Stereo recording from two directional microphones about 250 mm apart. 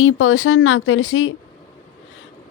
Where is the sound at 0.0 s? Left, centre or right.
Left.